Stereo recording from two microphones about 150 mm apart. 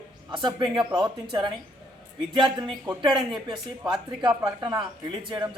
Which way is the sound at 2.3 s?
30° right (ahead or behind).